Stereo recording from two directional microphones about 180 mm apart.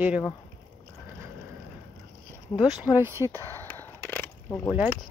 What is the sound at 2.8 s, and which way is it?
Speech, 10° right (ahead or behind).